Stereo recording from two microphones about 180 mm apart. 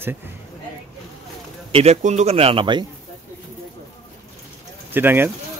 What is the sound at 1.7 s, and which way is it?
A man's voice, 35° right (ahead or behind).